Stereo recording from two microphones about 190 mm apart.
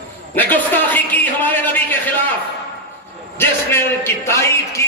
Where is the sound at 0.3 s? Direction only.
10° left (ahead or behind).